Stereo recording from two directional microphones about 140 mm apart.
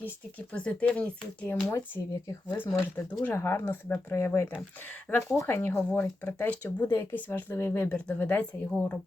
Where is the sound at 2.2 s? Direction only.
20° left (ahead or behind).